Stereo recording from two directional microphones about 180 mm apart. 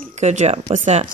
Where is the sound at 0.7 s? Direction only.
40° right (ahead or behind).